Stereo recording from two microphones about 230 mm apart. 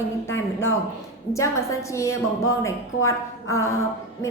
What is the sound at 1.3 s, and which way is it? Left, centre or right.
A woman's voice, centre.